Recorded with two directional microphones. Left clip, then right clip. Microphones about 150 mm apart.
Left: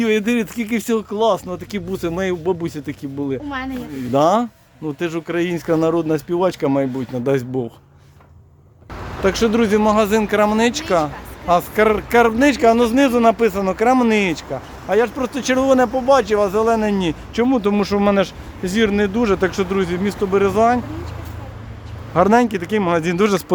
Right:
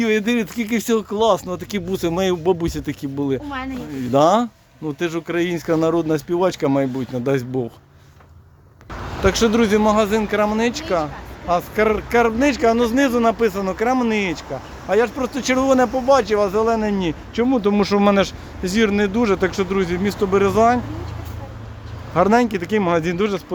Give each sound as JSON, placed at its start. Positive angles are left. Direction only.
{"t": 0.0, "sound": "speech", "side_deg": 10}
{"t": 4.1, "sound": "speech", "side_deg": 0}
{"t": 9.2, "sound": "speech", "side_deg": 0}
{"t": 14.8, "sound": "speech", "side_deg": 10}
{"t": 17.8, "sound": "speech", "side_deg": -10}
{"t": 22.1, "sound": "speech", "side_deg": 15}